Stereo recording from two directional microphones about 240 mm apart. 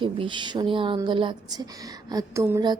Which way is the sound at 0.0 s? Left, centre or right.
Centre.